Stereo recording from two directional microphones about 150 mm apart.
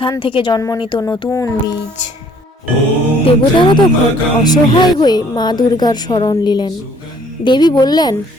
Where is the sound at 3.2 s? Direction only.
35° left (ahead or behind).